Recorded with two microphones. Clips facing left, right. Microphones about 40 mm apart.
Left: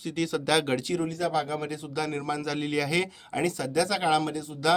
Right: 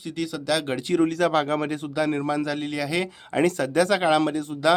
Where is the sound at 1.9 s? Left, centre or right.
Right.